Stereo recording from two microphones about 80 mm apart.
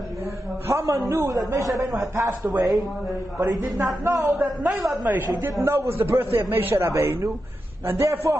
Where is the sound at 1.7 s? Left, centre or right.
Centre.